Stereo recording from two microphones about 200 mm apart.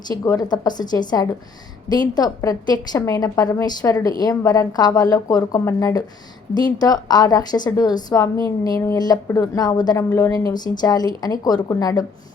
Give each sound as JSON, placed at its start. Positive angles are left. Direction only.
{"t": 0.1, "sound": "a woman's voice", "side_deg": 20}